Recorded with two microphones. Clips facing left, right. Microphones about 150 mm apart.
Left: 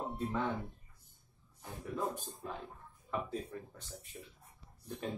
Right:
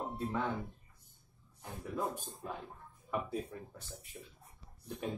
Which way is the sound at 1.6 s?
10° right (ahead or behind).